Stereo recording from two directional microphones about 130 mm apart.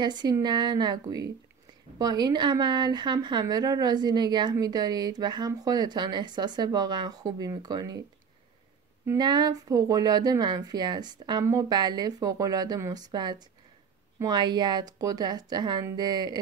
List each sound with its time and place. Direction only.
0.0 s a woman's voice: 35° right (ahead or behind)
9.0 s a woman's voice: 30° right (ahead or behind)